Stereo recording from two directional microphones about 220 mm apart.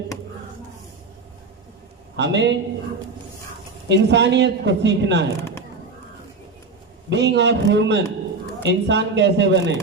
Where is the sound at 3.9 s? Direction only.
50° right (ahead or behind).